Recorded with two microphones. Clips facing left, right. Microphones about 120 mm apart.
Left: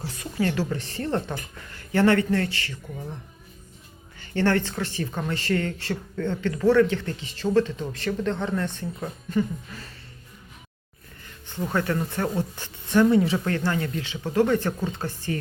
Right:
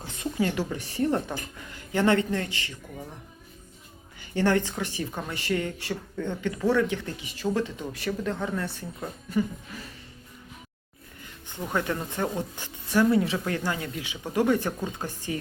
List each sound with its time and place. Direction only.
0.0 s speech: 20° right (ahead or behind)
4.2 s speech: 15° right (ahead or behind)
11.2 s speech: 15° right (ahead or behind)
13.5 s speech: 10° right (ahead or behind)